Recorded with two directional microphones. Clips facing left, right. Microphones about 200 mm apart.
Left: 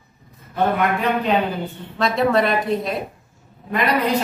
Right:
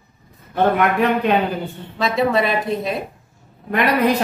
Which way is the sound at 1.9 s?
Centre (ahead or behind).